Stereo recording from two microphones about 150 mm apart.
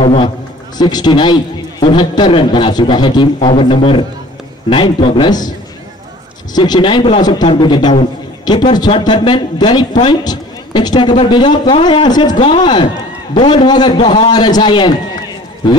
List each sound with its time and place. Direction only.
0.0 s a man's voice: 40° left (ahead or behind)
0.7 s a man's voice: 30° left (ahead or behind)
6.5 s speech: 30° left (ahead or behind)